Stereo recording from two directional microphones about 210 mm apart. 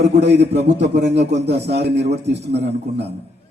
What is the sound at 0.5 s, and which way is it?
Speech, 30° right (ahead or behind).